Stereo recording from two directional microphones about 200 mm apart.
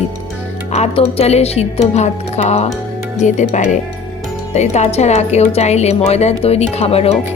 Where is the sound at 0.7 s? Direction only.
30° left (ahead or behind).